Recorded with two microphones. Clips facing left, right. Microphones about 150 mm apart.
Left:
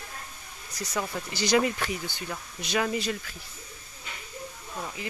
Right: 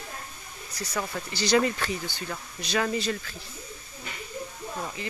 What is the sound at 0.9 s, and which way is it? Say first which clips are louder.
Speech: even; 15° left (ahead or behind).